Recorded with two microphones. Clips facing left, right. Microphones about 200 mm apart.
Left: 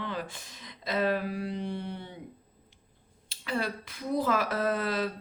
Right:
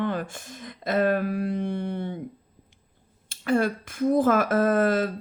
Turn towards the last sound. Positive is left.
turn(degrees=-50)  # may be behind; listen again after turning